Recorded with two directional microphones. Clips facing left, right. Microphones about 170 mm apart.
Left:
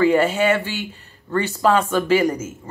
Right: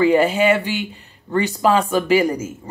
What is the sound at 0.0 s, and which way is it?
Speech, 15° right (ahead or behind).